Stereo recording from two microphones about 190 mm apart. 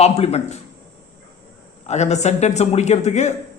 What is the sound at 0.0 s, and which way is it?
Speech, 35° left (ahead or behind).